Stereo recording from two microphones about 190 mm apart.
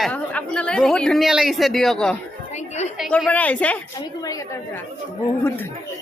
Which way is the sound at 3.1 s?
5° left (ahead or behind).